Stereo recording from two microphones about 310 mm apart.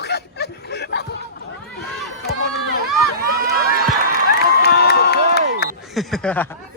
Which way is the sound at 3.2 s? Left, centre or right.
Right.